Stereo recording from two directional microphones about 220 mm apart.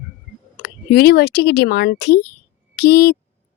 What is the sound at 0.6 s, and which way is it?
Speech, 45° left (ahead or behind).